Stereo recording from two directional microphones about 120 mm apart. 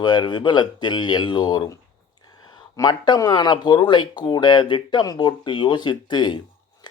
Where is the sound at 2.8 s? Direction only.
40° left (ahead or behind).